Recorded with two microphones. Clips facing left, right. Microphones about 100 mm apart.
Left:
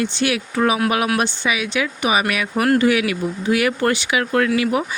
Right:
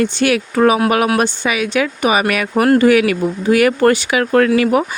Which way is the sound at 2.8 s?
50° right (ahead or behind).